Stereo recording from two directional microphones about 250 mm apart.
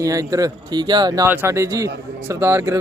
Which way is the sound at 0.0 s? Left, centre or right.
Centre.